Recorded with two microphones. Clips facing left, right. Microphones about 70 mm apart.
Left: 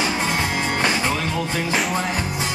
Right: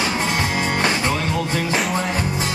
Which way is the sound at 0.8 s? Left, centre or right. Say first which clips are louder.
Even; centre.